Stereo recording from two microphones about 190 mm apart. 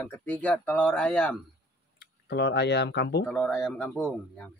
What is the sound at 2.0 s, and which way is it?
Speech, 60° left (ahead or behind).